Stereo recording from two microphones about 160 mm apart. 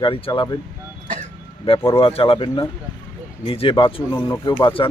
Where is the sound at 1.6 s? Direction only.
35° left (ahead or behind).